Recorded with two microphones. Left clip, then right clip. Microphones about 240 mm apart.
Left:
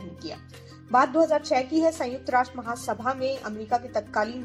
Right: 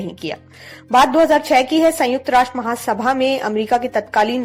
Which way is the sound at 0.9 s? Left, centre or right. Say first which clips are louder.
Right 9 dB; right.